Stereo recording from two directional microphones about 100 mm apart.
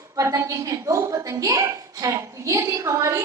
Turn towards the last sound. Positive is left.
turn(degrees=-30)  # may be behind; listen again after turning